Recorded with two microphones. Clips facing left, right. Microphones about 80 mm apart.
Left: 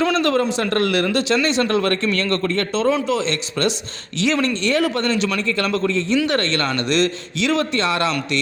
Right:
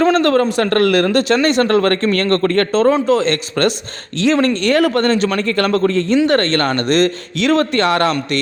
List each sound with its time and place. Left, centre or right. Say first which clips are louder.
0.0 s speech: right 5 dB; right